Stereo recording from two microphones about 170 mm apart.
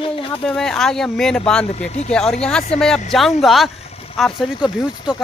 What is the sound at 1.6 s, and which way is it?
Speech, 40° left (ahead or behind).